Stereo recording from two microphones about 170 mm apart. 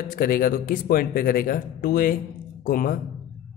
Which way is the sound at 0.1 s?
55° left (ahead or behind).